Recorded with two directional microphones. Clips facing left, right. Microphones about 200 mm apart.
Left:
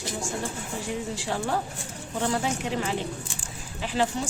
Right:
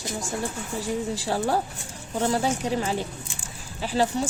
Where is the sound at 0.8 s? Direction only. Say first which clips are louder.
Right 5 dB; 35° right (ahead or behind).